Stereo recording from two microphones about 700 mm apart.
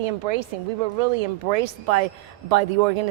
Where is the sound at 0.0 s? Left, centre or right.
Right.